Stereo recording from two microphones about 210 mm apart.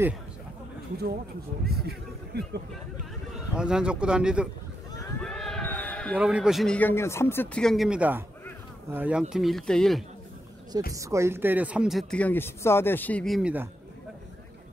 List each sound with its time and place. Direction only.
1.7 s speech: 50° right (ahead or behind)
3.3 s speech: 5° right (ahead or behind)
5.2 s a sound: 5° left (ahead or behind)
6.1 s speech: 5° right (ahead or behind)
10.9 s speech: 15° right (ahead or behind)